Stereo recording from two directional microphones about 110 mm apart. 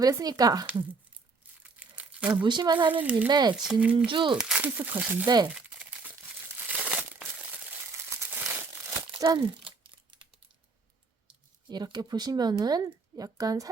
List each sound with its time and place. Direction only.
0.0 s speech: 35° right (ahead or behind)
1.6 s crumpling: 10° right (ahead or behind)
2.3 s speech: 45° right (ahead or behind)
2.9 s speech: 15° right (ahead or behind)
3.2 s speech: 40° right (ahead or behind)
3.5 s speech: 5° right (ahead or behind)
3.9 s speech: 50° right (ahead or behind)
4.4 s speech: 10° right (ahead or behind)
6.7 s crumpling: 10° right (ahead or behind)
9.2 s speech: 35° right (ahead or behind)
9.6 s crumpling: 45° right (ahead or behind)
11.7 s speech: 40° right (ahead or behind)